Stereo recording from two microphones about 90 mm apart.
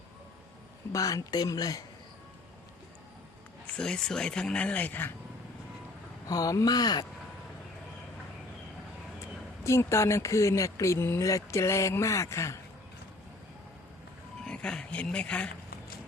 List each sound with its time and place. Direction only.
0.9 s speech: 40° left (ahead or behind)
3.8 s speech: 10° left (ahead or behind)
6.2 s speech: 40° left (ahead or behind)
9.6 s speech: 30° left (ahead or behind)
14.4 s speech: 10° left (ahead or behind)